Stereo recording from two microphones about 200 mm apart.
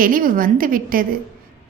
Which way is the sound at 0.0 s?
45° right (ahead or behind).